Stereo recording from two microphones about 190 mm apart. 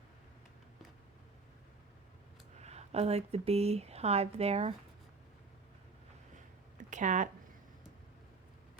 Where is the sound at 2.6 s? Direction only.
35° right (ahead or behind).